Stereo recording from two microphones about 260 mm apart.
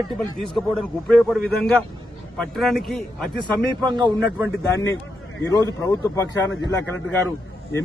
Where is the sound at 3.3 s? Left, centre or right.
Centre.